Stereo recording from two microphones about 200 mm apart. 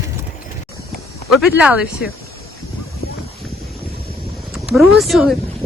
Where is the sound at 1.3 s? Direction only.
5° right (ahead or behind).